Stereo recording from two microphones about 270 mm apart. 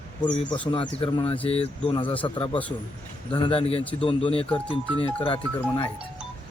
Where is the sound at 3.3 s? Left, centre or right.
Centre.